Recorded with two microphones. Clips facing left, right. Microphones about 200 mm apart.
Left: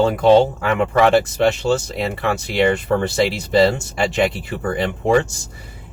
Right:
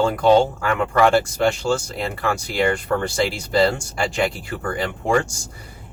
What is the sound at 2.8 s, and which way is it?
Speech, 20° left (ahead or behind).